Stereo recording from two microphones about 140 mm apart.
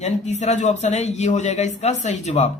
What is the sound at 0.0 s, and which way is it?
Speech, 55° left (ahead or behind).